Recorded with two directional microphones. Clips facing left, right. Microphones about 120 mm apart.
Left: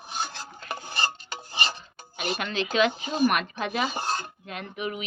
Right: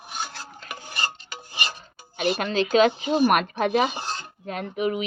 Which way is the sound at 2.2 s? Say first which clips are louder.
Right 6 dB; 40° right (ahead or behind).